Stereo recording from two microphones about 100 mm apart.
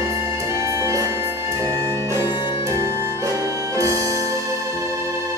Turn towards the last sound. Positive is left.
turn(degrees=-30)  # may be behind; listen again after turning